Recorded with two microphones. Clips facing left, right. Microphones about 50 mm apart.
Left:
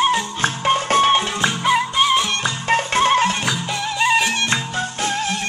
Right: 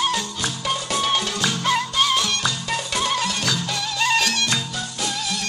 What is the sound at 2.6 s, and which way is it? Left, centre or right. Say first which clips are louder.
Music: left 8 dB; left.